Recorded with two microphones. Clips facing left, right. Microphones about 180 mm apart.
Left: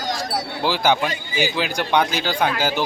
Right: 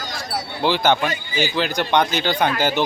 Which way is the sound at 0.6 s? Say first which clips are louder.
Right 2 dB; 5° left (ahead or behind).